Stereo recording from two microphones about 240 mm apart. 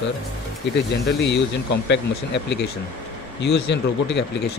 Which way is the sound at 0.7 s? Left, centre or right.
Left.